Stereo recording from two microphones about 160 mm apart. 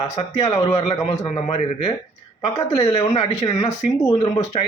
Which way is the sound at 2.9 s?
40° left (ahead or behind).